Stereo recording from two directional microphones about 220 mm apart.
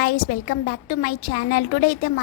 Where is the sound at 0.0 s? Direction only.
45° left (ahead or behind).